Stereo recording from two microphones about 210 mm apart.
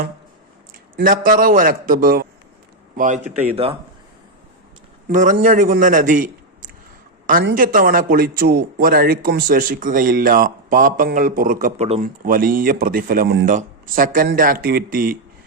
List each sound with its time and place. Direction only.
0.9 s a man's voice: 40° right (ahead or behind)
3.5 s speech: 25° right (ahead or behind)
5.0 s a man's voice: 35° right (ahead or behind)